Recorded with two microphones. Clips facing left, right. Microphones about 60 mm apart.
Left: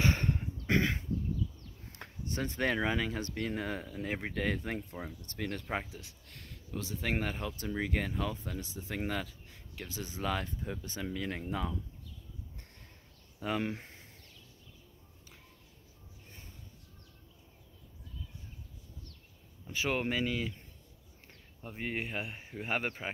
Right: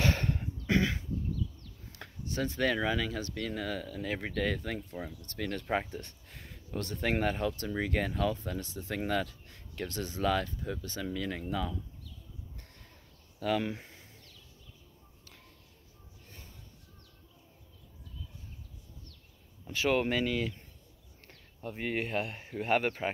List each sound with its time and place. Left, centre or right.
0.0 s a sound: left
0.6 s throat clearing: left
1.9 s speech: left
5.4 s speech: centre
5.7 s speech: centre
8.9 s speech: centre
13.4 s speech: centre
19.9 s speech: centre
21.6 s speech: centre